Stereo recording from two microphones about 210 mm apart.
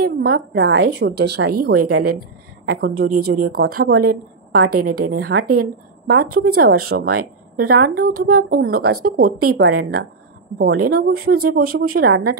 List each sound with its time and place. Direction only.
0.0 s a woman's voice: 50° right (ahead or behind)